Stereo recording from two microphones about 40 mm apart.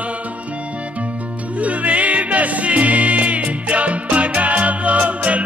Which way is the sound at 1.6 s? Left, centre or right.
Right.